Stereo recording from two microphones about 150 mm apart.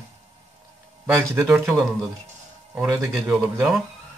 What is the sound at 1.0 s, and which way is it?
Speech, 5° right (ahead or behind).